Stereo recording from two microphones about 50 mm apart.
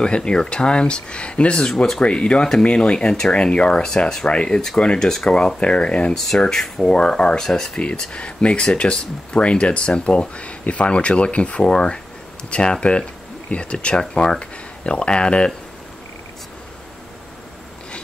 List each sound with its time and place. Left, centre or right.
0.0 s speech: centre
6.1 s speech: centre
6.8 s speech: centre